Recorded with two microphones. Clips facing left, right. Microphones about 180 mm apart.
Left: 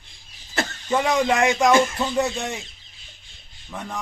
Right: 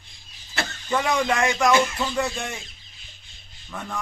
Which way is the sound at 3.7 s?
15° left (ahead or behind).